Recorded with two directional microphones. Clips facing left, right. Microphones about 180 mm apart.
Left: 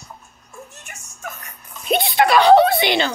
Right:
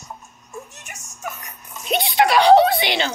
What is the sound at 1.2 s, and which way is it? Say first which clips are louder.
Music: right 2 dB; 20° right (ahead or behind).